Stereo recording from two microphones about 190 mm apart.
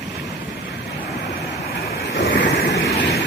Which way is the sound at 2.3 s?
65° left (ahead or behind).